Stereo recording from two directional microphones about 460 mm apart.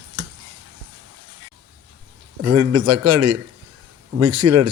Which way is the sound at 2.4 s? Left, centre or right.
Right.